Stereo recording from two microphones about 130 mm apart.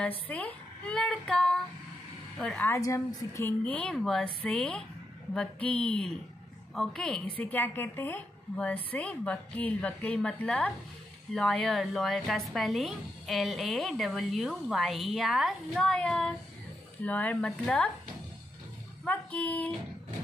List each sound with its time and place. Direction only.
0.3 s a woman's voice: 10° left (ahead or behind)
2.6 s a woman's voice: 25° left (ahead or behind)
3.6 s a woman's voice: 5° left (ahead or behind)
19.0 s a woman's voice: 10° left (ahead or behind)